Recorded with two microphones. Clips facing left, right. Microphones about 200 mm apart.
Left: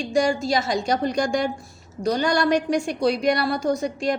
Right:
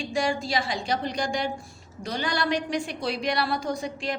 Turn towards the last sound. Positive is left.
turn(degrees=45)  # may be behind; listen again after turning